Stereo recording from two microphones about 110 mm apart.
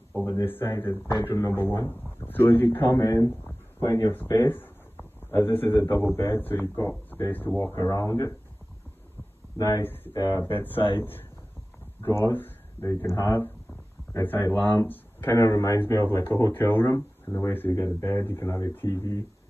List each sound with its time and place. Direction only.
0.1 s speech: 25° left (ahead or behind)
2.9 s speech: 30° left (ahead or behind)
9.6 s speech: 30° left (ahead or behind)
10.4 s speech: 20° left (ahead or behind)
12.0 s speech: 20° left (ahead or behind)